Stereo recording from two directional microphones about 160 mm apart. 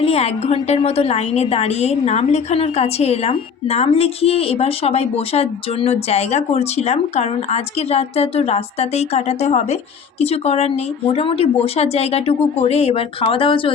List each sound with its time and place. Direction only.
0.0 s a woman's voice: 40° left (ahead or behind)